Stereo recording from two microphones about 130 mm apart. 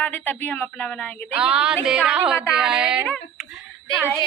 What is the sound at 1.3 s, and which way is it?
Speech, 10° right (ahead or behind).